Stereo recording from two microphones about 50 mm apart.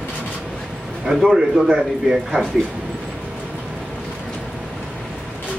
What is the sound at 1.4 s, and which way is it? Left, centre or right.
Speech, centre.